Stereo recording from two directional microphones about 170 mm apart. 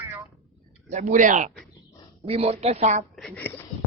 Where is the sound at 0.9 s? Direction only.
50° right (ahead or behind).